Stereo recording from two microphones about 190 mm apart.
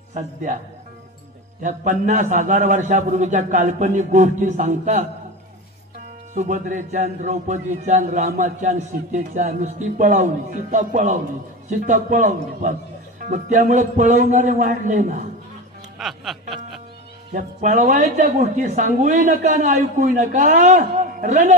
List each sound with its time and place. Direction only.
0.1 s a man's voice: 45° right (ahead or behind)
1.6 s a man's voice: 40° right (ahead or behind)
6.3 s a man's voice: 40° right (ahead or behind)
16.0 s music: centre (ahead or behind)
17.3 s a man's voice: 45° right (ahead or behind)